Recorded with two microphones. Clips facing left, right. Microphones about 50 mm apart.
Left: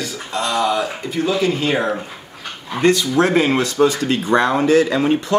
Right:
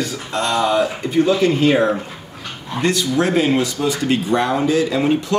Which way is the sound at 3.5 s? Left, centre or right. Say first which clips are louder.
Left 3 dB; left.